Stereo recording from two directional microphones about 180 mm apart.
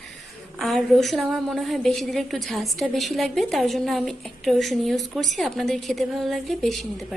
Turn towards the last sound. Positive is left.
turn(degrees=0)  # may be behind; listen again after turning